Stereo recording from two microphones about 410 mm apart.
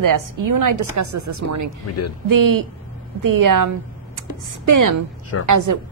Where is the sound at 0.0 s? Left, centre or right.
Right.